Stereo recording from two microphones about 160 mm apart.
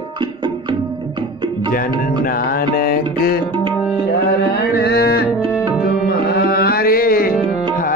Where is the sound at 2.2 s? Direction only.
65° left (ahead or behind).